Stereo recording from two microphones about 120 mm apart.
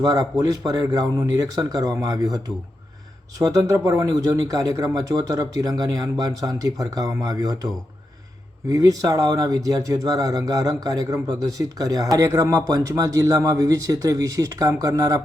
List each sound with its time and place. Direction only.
0.0 s speech: 30° right (ahead or behind)
8.7 s speech: 30° right (ahead or behind)